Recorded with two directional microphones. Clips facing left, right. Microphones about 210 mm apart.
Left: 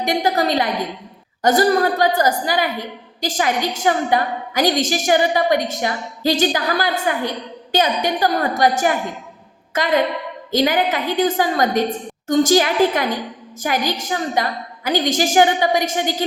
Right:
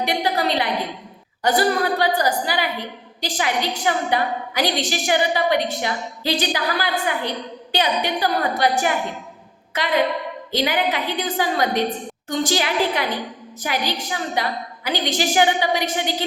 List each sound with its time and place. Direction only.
0.0 s a woman's voice: 45° left (ahead or behind)